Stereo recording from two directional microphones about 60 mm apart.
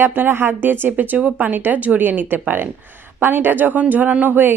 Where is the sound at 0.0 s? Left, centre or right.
Right.